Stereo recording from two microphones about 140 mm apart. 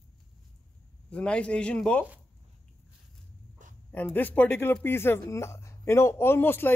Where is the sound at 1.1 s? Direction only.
5° left (ahead or behind).